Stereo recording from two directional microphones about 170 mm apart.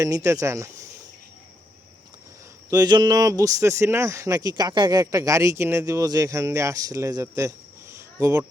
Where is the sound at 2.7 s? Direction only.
25° right (ahead or behind).